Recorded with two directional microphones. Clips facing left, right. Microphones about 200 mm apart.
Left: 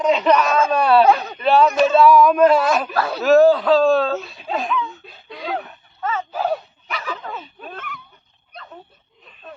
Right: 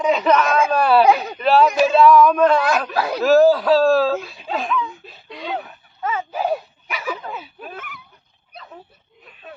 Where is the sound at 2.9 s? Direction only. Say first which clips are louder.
Even; 10° right (ahead or behind).